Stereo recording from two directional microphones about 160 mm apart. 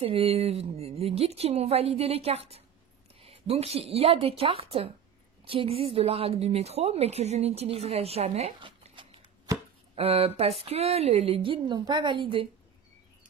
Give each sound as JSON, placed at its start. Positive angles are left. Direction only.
{"t": 0.0, "sound": "a woman's voice", "side_deg": -35}